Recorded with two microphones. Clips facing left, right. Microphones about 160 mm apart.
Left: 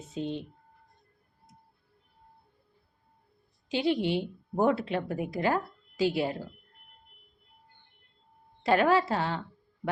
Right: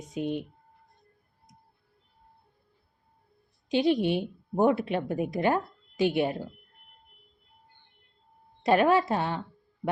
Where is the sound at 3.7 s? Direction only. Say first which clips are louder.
Right 3 dB; 20° right (ahead or behind).